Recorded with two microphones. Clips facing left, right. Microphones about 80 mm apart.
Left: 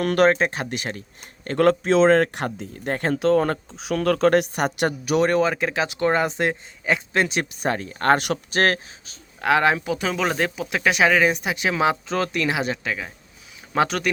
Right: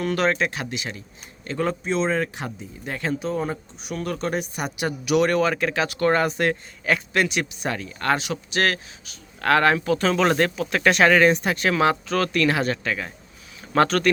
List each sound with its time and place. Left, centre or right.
0.0 s speech: left
0.3 s a man's voice: left
1.5 s speech: left
3.2 s speech: left
4.9 s a man's voice: left
9.4 s speech: centre